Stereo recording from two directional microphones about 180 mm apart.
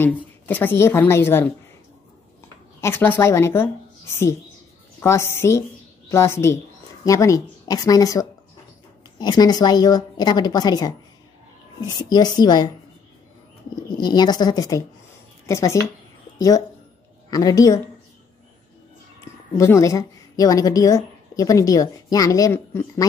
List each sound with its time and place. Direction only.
0.0 s a woman's voice: 10° left (ahead or behind)
2.8 s a woman's voice: 10° left (ahead or behind)
13.9 s a woman's voice: 25° left (ahead or behind)
19.5 s a woman's voice: 15° left (ahead or behind)